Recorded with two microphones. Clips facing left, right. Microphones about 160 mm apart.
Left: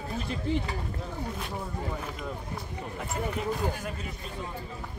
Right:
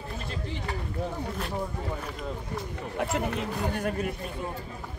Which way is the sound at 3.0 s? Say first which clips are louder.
Right 6 dB; 80° right.